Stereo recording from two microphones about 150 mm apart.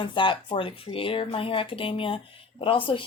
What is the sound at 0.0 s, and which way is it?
Speech, 35° left (ahead or behind).